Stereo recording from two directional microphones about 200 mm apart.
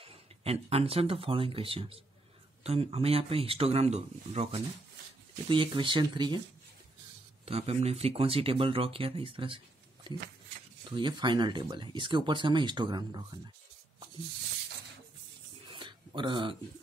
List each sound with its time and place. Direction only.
0.0 s speech: 30° right (ahead or behind)
7.4 s speech: 30° right (ahead or behind)
11.0 s speech: 25° right (ahead or behind)
15.7 s a sound: 25° right (ahead or behind)